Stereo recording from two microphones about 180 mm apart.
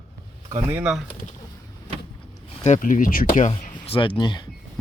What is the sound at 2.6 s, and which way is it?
Speech, 45° left (ahead or behind).